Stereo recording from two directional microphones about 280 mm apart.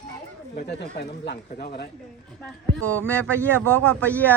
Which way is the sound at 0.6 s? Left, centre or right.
Left.